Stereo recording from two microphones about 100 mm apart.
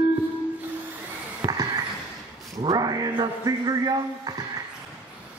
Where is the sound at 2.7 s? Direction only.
40° right (ahead or behind).